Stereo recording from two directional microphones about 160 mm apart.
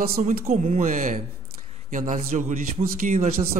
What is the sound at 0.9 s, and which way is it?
Music, 60° right (ahead or behind).